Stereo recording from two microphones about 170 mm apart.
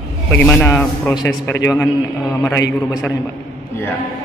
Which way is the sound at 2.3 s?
15° left (ahead or behind).